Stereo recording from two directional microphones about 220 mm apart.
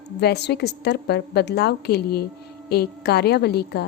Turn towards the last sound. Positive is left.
turn(degrees=45)  # may be behind; listen again after turning